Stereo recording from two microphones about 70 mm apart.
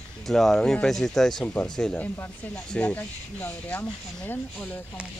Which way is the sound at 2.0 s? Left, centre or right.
Left.